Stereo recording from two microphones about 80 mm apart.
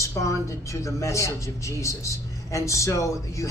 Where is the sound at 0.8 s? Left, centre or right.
Left.